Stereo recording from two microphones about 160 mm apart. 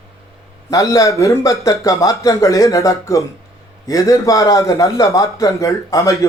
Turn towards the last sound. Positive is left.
turn(degrees=20)  # may be behind; listen again after turning